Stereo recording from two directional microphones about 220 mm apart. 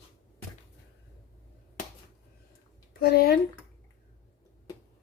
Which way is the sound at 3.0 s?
45° left (ahead or behind).